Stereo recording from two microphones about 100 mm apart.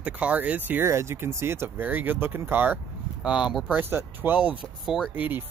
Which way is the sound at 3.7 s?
20° right (ahead or behind).